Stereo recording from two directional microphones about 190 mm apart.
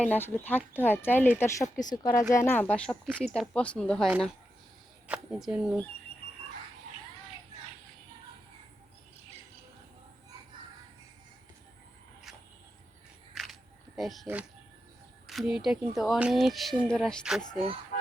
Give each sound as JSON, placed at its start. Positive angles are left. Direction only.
{"t": 0.0, "sound": "speech", "side_deg": 10}
{"t": 13.3, "sound": "single-lens reflex camera", "side_deg": 0}
{"t": 15.3, "sound": "speech", "side_deg": 0}